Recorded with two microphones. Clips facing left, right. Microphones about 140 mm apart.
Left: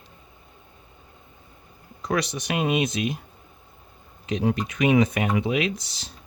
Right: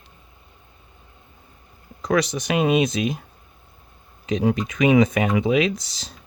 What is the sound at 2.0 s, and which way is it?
Speech, 90° right.